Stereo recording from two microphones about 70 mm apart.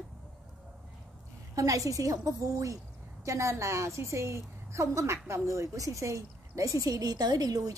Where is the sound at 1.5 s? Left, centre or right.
Right.